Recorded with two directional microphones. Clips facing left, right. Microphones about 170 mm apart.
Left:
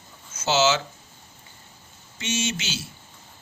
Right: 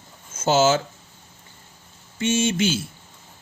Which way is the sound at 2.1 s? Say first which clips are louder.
Right 7 dB; 50° right (ahead or behind).